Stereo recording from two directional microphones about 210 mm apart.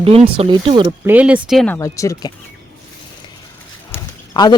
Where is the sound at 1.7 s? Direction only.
15° left (ahead or behind).